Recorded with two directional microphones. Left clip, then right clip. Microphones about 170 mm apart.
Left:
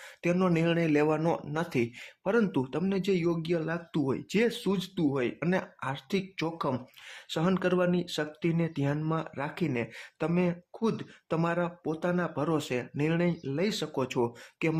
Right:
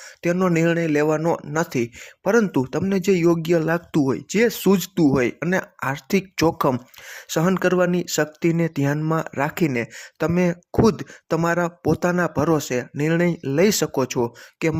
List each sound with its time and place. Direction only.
0.2 s speech: 25° right (ahead or behind)
4.1 s speech: 30° right (ahead or behind); by 6.7 s 45° right (ahead or behind)
6.7 s speech: 35° right (ahead or behind)